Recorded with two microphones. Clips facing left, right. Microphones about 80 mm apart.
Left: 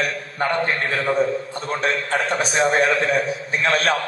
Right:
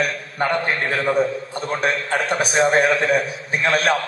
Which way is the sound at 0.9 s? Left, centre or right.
Centre.